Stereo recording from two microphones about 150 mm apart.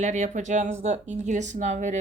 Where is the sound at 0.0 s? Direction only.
55° right (ahead or behind).